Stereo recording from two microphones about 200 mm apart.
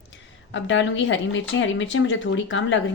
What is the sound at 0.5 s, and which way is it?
Speech, 70° left (ahead or behind).